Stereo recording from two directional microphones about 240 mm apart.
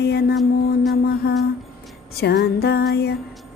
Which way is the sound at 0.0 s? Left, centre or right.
Left.